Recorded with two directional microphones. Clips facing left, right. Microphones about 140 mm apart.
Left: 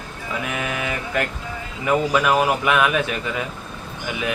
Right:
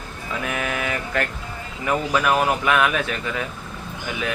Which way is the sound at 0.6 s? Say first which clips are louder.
Even; 20° left (ahead or behind).